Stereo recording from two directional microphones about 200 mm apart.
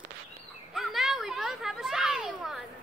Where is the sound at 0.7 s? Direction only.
Centre (ahead or behind).